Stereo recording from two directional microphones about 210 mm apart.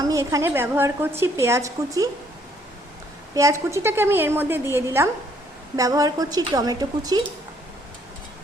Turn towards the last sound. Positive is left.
turn(degrees=-20)  # may be behind; listen again after turning